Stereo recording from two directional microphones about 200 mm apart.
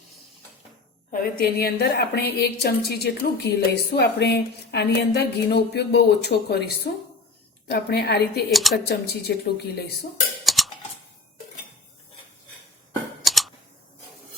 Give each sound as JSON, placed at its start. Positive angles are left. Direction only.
{"t": 1.1, "sound": "a woman's voice", "side_deg": 50}
{"t": 8.4, "sound": "speech", "side_deg": 0}
{"t": 8.9, "sound": "a woman's voice", "side_deg": 55}
{"t": 10.4, "sound": "a sound", "side_deg": 0}
{"t": 13.2, "sound": "scissors", "side_deg": 0}